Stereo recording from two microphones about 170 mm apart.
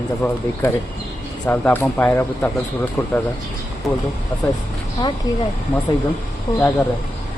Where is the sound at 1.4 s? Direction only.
10° left (ahead or behind).